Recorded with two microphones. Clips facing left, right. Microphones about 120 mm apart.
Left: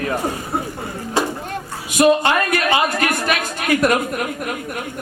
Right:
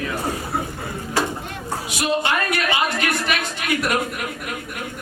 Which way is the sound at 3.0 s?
45° left (ahead or behind).